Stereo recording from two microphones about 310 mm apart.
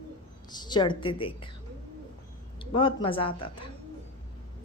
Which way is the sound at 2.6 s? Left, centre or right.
Centre.